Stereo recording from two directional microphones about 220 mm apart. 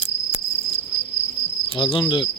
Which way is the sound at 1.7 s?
20° left (ahead or behind).